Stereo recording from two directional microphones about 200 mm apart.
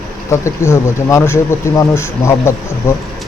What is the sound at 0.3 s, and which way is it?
Speech, 15° left (ahead or behind).